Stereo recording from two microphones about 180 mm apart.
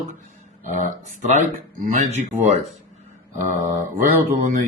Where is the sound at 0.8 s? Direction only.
45° right (ahead or behind).